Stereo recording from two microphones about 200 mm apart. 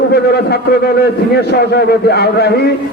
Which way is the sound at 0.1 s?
50° left (ahead or behind).